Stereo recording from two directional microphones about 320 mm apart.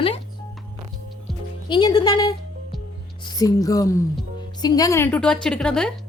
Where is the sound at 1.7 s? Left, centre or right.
Centre.